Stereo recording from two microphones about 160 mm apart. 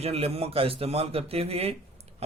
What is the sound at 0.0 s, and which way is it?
Speech, 40° right (ahead or behind).